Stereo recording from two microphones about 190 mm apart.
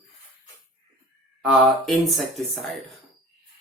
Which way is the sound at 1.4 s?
Centre (ahead or behind).